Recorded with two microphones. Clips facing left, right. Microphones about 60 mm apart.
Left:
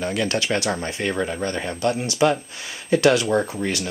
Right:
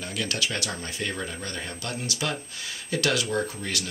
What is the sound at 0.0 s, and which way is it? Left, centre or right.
Speech, left.